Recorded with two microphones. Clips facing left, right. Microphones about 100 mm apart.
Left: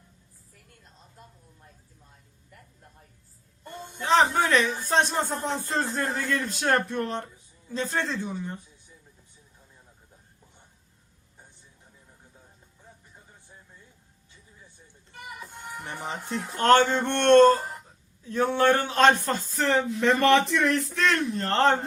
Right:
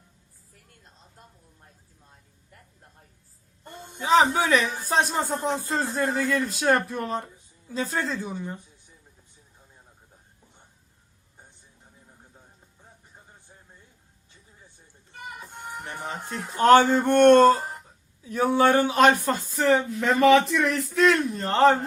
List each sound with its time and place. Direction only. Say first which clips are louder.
4.0 s a man's voice: right 2 dB; 5° right (ahead or behind)
15.4 s music: right 1 dB; 30° right (ahead or behind)
16.6 s speech: right 3 dB; 10° right (ahead or behind)